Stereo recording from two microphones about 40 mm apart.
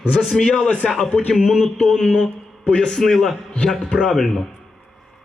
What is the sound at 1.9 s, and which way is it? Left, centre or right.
A man's voice, centre.